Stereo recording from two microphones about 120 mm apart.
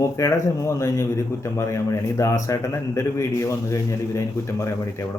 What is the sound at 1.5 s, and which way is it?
Speech, 25° left (ahead or behind).